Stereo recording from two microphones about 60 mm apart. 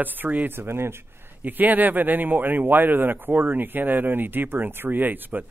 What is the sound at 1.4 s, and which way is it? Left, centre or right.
Speech, right.